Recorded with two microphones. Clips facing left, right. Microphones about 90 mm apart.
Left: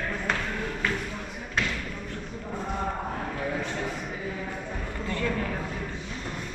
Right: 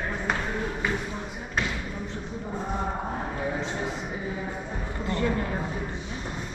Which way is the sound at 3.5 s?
20° right (ahead or behind).